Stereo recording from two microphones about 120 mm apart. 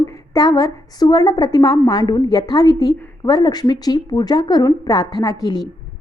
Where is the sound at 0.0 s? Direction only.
30° left (ahead or behind).